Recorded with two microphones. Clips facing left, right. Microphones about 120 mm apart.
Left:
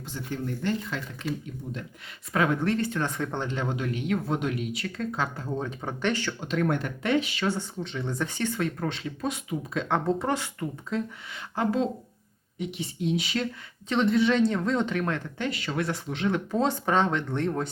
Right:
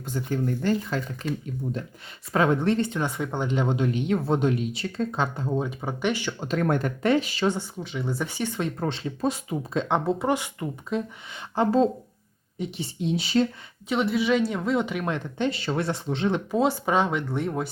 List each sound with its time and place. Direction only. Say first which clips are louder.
0.1 s speech: right 6 dB; 40° right (ahead or behind)
2.3 s speech: right 3 dB; 30° right (ahead or behind)
3.0 s speech: right 2 dB; 10° right (ahead or behind)
5.5 s speech: right 3 dB; 10° right (ahead or behind)
6.4 s speech: right 3 dB; 40° right (ahead or behind)
7.4 s speech: right 3 dB; 15° right (ahead or behind); by 9.8 s 35° right (ahead or behind)
9.9 s speech: right 2 dB; 15° right (ahead or behind); by 13.5 s 30° right (ahead or behind)
13.8 s speech: left 1 dB; 10° right (ahead or behind); by 16.4 s 30° right (ahead or behind)
16.5 s speech: right 3 dB; 10° right (ahead or behind)